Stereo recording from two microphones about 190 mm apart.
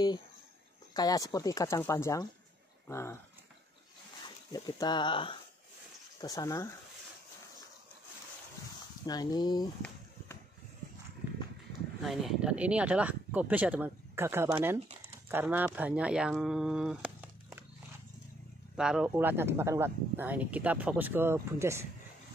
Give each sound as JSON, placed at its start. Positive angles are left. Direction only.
{"t": 0.9, "sound": "speech", "side_deg": 20}
{"t": 4.5, "sound": "speech", "side_deg": 20}
{"t": 9.0, "sound": "speech", "side_deg": 20}
{"t": 12.0, "sound": "speech", "side_deg": 0}
{"t": 18.8, "sound": "speech", "side_deg": -5}